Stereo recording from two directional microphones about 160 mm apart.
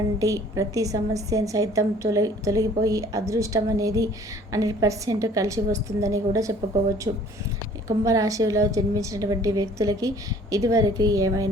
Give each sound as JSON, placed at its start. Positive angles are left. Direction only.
{"t": 0.2, "sound": "a woman's voice", "side_deg": -20}
{"t": 7.9, "sound": "a woman's voice", "side_deg": -20}